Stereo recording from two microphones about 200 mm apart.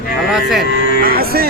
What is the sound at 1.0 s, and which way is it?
Music, 50° right (ahead or behind).